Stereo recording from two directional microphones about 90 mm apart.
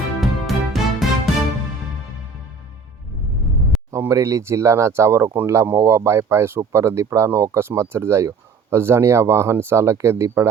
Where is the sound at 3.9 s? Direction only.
35° right (ahead or behind).